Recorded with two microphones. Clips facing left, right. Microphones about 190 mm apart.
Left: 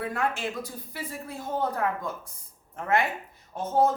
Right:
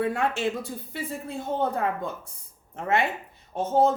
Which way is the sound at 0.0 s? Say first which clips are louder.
Right 4 dB; 25° right (ahead or behind).